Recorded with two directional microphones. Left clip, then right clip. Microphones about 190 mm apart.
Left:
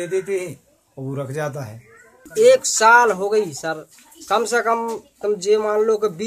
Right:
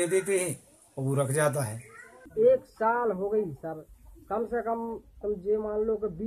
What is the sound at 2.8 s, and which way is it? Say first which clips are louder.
Speech: left 14 dB; 25° left (ahead or behind).